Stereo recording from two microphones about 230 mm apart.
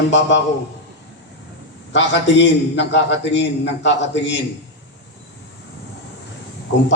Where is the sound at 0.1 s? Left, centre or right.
Left.